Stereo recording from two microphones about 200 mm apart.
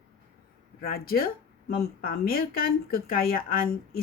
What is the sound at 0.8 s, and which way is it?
Speech, 50° left (ahead or behind).